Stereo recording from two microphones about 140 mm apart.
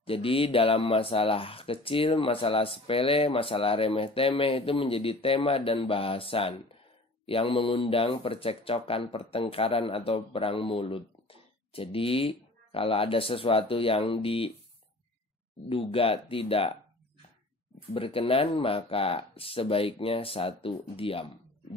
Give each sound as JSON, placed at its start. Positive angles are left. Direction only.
{"t": 0.0, "sound": "speech", "side_deg": 40}
{"t": 15.7, "sound": "speech", "side_deg": 40}
{"t": 17.9, "sound": "speech", "side_deg": 40}